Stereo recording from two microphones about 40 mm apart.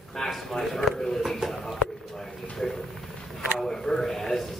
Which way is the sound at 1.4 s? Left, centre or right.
Centre.